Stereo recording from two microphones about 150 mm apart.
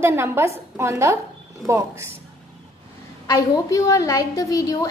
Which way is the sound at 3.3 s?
20° left (ahead or behind).